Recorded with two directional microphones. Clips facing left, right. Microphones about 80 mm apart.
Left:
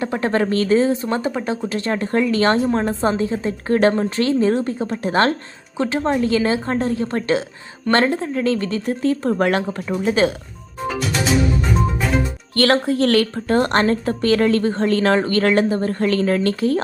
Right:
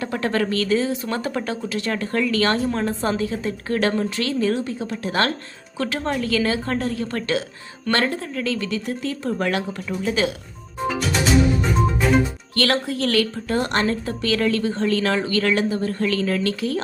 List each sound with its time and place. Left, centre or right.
0.0 s a woman's voice: left
1.3 s speech: centre
1.6 s a woman's voice: left
5.7 s a woman's voice: left
11.6 s music: centre
12.5 s a woman's voice: left
13.1 s a woman's voice: left